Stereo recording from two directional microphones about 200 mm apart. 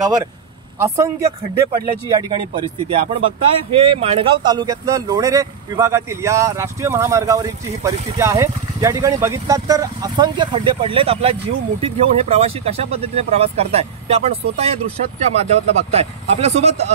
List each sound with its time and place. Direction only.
0.0 s speech: 20° right (ahead or behind)